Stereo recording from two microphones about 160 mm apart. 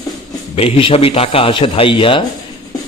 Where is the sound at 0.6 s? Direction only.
35° left (ahead or behind).